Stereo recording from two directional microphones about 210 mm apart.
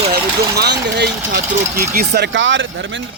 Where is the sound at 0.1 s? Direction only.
50° right (ahead or behind).